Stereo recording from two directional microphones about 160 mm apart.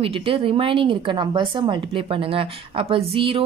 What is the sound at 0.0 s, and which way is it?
A woman's voice, 35° right (ahead or behind).